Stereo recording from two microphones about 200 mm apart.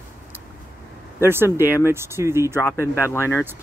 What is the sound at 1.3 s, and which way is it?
Speech, 10° right (ahead or behind).